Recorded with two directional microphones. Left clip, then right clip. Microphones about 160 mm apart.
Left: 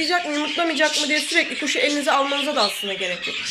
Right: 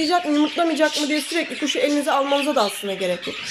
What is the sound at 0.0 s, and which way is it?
Speech, 15° right (ahead or behind).